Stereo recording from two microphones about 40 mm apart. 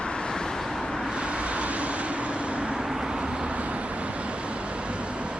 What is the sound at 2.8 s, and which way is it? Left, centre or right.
Vehicle, centre.